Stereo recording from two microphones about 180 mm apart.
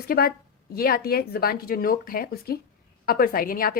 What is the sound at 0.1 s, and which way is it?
A woman's voice, 55° left (ahead or behind).